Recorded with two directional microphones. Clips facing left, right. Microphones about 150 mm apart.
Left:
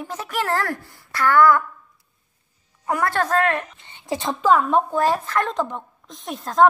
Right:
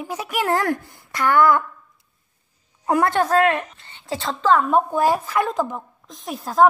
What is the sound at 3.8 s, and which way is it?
Speech, 15° left (ahead or behind).